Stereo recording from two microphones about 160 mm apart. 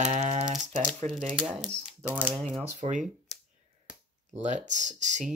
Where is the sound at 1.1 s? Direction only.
5° right (ahead or behind).